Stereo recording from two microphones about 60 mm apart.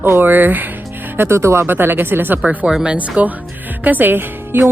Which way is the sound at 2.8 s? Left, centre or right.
Centre.